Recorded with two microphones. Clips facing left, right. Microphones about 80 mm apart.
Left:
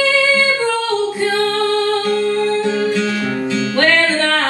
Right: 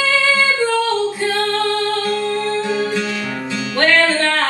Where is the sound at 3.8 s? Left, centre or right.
Left.